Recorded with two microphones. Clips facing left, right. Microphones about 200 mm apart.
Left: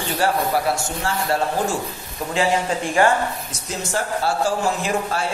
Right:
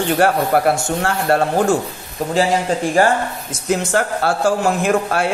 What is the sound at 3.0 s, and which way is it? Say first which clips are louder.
Speech: right 2 dB; 40° right (ahead or behind).